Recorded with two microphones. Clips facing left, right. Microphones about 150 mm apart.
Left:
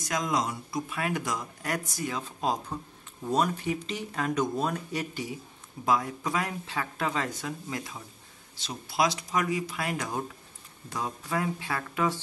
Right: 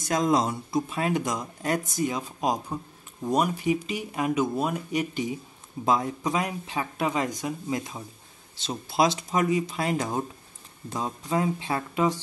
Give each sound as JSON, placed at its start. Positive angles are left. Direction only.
{"t": 0.0, "sound": "speech", "side_deg": -30}